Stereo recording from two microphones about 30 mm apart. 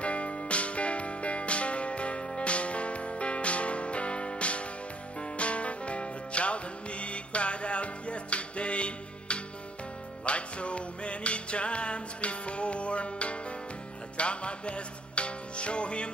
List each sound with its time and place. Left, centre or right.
0.0 s music: left